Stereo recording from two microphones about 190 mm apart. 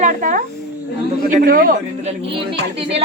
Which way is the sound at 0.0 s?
45° right (ahead or behind).